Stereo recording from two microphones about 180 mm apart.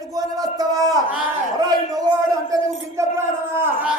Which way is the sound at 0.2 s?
20° right (ahead or behind).